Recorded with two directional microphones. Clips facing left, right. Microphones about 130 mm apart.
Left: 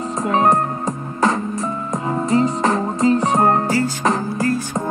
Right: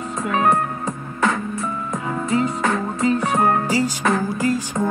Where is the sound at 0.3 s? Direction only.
35° left (ahead or behind).